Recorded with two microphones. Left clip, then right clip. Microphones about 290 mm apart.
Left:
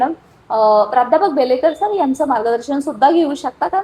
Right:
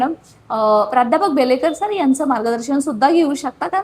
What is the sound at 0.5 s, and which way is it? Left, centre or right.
A woman's voice, right.